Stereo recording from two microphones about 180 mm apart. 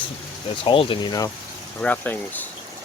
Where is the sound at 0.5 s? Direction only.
30° left (ahead or behind).